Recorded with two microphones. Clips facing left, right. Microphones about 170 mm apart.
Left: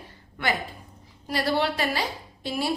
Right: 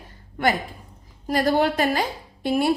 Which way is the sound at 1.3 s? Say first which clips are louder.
Right 5 dB; 45° right (ahead or behind).